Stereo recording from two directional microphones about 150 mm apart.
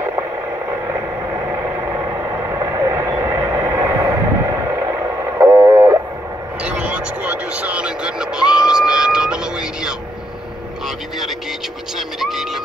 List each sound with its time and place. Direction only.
1.5 s vehicle: 20° right (ahead or behind)
6.6 s vehicle: 10° right (ahead or behind)
12.2 s vehicle: centre (ahead or behind)